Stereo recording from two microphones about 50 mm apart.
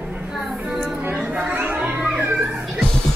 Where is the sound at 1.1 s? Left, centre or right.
Right.